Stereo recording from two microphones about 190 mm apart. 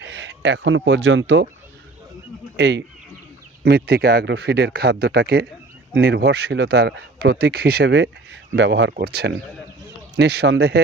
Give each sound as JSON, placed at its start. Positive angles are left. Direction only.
{"t": 0.0, "sound": "speech", "side_deg": -70}
{"t": 2.6, "sound": "speech", "side_deg": -65}